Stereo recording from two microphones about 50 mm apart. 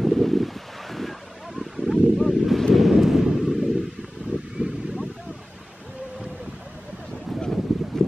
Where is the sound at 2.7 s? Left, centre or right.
Centre.